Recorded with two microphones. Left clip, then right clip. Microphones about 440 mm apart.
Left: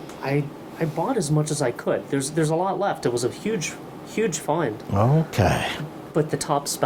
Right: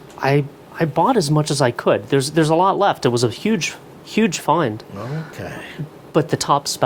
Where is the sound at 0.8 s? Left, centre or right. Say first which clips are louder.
Right 8 dB; right.